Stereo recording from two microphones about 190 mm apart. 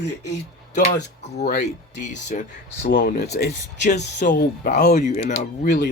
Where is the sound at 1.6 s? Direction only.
40° left (ahead or behind); by 4.7 s 60° left (ahead or behind).